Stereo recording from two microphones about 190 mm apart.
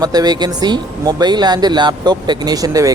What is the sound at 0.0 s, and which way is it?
Speech, 20° right (ahead or behind).